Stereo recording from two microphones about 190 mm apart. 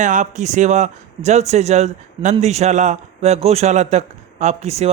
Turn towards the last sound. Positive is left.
turn(degrees=-35)  # may be behind; listen again after turning